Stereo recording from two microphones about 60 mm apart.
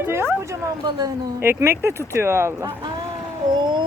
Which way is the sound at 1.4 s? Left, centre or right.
Right.